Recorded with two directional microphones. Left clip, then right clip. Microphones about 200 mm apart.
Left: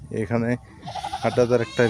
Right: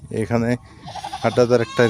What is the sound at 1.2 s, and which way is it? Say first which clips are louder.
Speech: right 4 dB; 25° right (ahead or behind).